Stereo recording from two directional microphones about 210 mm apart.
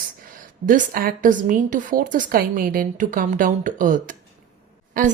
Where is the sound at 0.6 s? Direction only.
40° right (ahead or behind).